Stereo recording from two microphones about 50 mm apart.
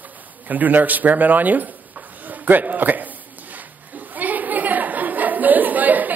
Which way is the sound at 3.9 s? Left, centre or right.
Right.